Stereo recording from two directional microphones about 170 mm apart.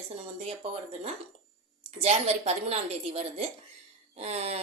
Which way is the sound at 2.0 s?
40° right (ahead or behind).